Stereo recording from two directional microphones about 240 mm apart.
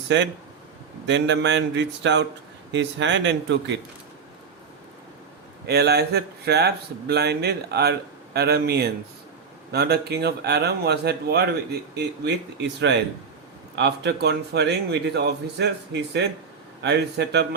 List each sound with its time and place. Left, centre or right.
0.1 s speech: right
5.6 s speech: right